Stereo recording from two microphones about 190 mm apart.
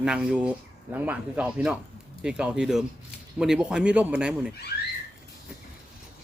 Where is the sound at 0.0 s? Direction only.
5° right (ahead or behind).